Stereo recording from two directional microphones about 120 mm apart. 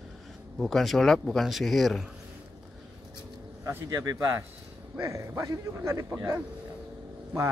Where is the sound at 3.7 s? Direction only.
25° right (ahead or behind).